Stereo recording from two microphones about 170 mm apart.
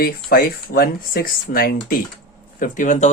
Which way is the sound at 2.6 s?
50° left (ahead or behind).